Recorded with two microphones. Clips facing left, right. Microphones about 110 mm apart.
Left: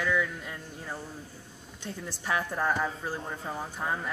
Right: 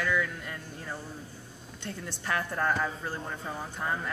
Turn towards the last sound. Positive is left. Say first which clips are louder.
# left 1 dB
turn(degrees=10)  # may be behind; listen again after turning